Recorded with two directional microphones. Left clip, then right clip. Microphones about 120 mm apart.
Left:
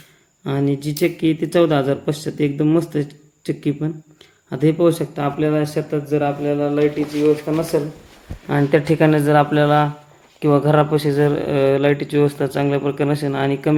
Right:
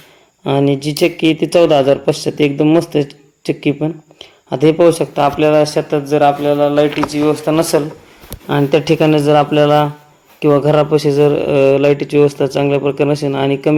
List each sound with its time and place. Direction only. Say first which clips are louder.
0.4 s speech: right 7 dB; 5° right (ahead or behind)
5.2 s speech: right 9 dB; 25° right (ahead or behind)
7.3 s speech: right 4 dB; 75° right (ahead or behind)
8.4 s speech: right 4 dB; 10° right (ahead or behind)